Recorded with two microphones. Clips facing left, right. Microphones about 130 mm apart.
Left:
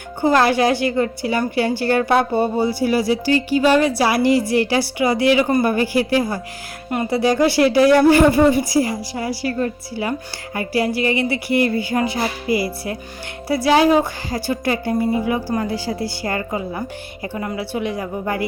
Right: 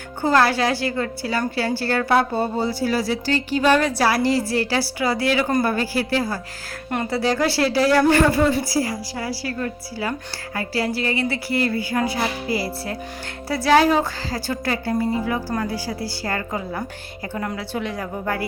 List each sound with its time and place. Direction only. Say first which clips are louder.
0.2 s a woman's voice: left 3 dB; 15° left (ahead or behind)